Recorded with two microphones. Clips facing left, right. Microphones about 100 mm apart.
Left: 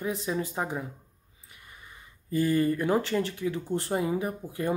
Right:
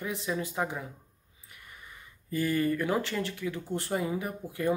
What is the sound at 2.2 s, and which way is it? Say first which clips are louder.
Speech: left 3 dB; 25° left (ahead or behind).